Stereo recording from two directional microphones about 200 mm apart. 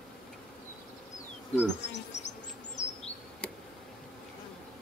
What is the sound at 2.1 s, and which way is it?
Bee, 35° left (ahead or behind).